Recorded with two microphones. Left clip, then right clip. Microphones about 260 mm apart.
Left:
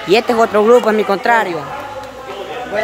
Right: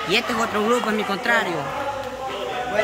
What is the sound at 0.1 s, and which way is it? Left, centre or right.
Speech, centre.